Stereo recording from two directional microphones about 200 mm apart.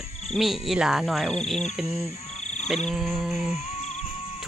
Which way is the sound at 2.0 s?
35° left (ahead or behind).